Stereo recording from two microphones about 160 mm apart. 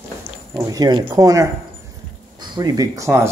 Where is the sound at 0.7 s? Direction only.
25° right (ahead or behind).